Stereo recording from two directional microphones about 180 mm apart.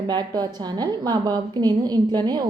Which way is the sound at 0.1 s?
25° right (ahead or behind).